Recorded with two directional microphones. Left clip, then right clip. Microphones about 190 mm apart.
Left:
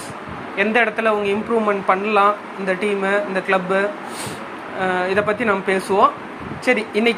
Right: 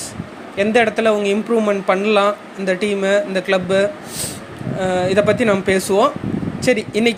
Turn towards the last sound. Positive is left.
turn(degrees=-85)